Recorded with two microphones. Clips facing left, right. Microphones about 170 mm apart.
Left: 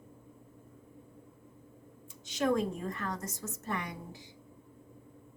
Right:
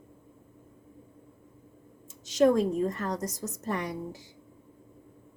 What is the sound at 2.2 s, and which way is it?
Speech, 40° right (ahead or behind).